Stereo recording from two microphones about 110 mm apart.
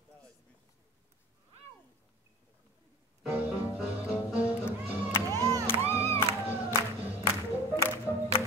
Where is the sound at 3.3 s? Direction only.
10° right (ahead or behind).